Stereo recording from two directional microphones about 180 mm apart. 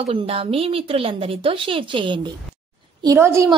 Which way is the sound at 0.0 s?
30° right (ahead or behind).